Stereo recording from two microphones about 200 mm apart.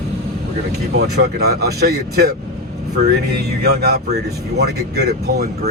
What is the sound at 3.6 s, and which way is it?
Speech, 55° right (ahead or behind).